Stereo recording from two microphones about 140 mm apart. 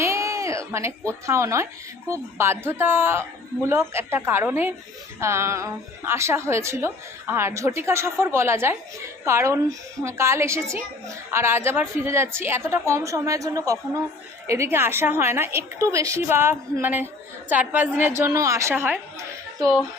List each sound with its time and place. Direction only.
0.0 s a woman's voice: 20° right (ahead or behind)